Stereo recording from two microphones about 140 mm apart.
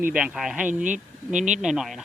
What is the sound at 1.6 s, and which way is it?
Speech, 5° right (ahead or behind).